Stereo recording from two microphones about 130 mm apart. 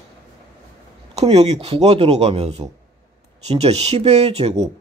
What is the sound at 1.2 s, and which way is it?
A man's voice, 55° right (ahead or behind).